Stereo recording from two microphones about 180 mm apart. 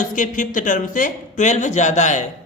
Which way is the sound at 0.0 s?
45° left (ahead or behind).